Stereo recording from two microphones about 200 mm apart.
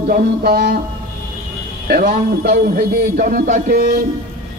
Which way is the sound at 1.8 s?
45° right (ahead or behind).